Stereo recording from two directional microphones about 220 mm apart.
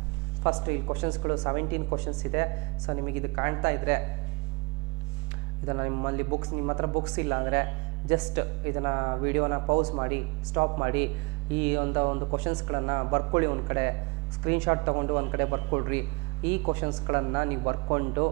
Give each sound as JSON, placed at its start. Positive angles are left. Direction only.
{"t": 0.4, "sound": "a man's voice", "side_deg": -20}
{"t": 5.7, "sound": "a man's voice", "side_deg": -20}